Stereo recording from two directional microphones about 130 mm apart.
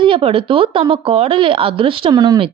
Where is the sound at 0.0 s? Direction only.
45° right (ahead or behind).